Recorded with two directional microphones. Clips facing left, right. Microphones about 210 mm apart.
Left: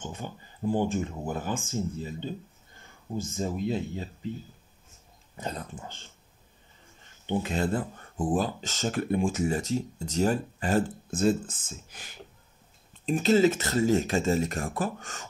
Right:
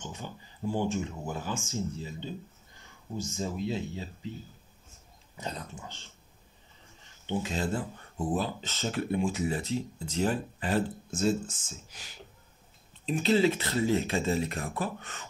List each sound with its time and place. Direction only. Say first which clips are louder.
0.0 s speech: left 3 dB; 55° left (ahead or behind)
5.4 s speech: left 3 dB; 50° left (ahead or behind)
7.2 s speech: left 3 dB; 60° left (ahead or behind)